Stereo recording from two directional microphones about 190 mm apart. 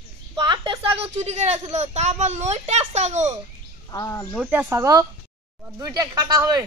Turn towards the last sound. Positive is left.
turn(degrees=-15)  # may be behind; listen again after turning